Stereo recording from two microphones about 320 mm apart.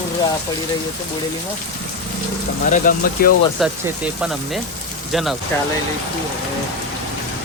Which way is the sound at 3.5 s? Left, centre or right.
Centre.